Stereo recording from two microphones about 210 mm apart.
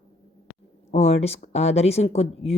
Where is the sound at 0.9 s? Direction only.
30° left (ahead or behind).